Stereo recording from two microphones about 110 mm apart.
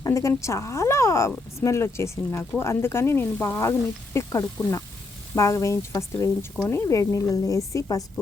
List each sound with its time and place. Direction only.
0.0 s a woman's voice: 30° left (ahead or behind)